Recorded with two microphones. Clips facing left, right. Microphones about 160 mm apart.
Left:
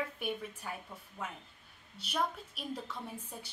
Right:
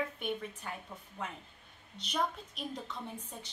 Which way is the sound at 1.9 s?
5° left (ahead or behind).